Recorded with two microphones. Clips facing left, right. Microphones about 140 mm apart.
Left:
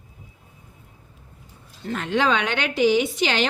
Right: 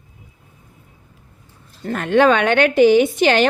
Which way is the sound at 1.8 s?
55° right (ahead or behind).